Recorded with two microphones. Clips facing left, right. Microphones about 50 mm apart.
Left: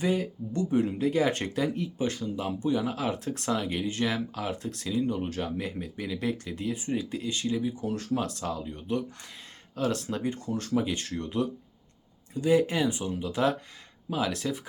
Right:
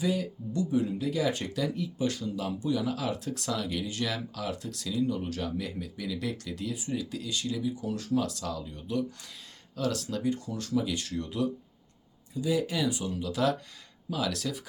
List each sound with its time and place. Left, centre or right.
0.0 s speech: left